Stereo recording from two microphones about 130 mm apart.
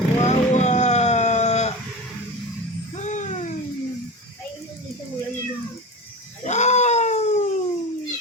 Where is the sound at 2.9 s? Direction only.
65° left (ahead or behind).